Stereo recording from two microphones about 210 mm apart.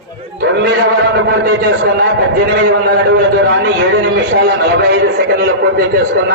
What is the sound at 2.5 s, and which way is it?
A man's voice, 60° right (ahead or behind).